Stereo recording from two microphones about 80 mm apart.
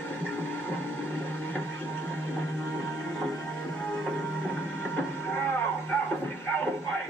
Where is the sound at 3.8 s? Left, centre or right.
Centre.